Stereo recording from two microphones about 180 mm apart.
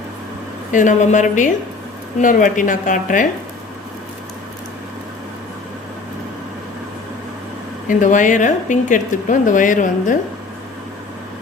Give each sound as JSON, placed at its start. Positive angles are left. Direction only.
{"t": 0.7, "sound": "speech", "side_deg": 45}
{"t": 7.9, "sound": "speech", "side_deg": 45}